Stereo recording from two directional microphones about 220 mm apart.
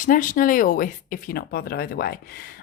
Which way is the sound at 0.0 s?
35° left (ahead or behind).